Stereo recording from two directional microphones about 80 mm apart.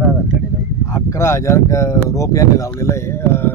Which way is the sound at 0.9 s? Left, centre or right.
Left.